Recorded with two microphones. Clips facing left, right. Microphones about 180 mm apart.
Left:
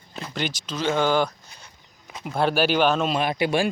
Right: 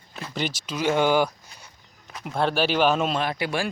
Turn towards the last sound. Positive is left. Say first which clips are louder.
# left 4 dB
turn(degrees=20)  # may be behind; listen again after turning